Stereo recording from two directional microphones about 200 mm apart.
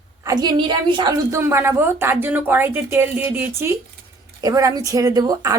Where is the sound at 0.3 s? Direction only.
20° right (ahead or behind).